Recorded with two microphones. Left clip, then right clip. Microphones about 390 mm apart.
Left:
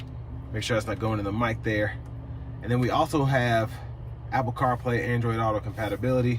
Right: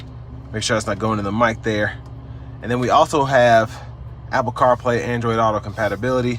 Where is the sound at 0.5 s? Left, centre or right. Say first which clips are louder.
Right 7 dB; centre.